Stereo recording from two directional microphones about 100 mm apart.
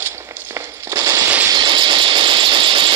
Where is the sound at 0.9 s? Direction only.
30° right (ahead or behind).